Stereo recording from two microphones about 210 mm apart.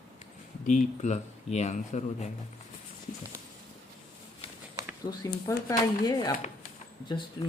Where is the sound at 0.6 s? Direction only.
35° left (ahead or behind).